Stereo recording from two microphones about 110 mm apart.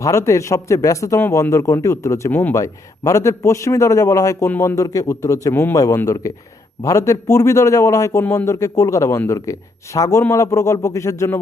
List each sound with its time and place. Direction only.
0.0 s a man's voice: 30° left (ahead or behind)